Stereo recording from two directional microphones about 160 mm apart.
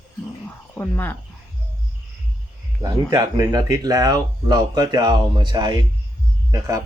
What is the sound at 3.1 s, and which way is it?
Speech, 20° right (ahead or behind).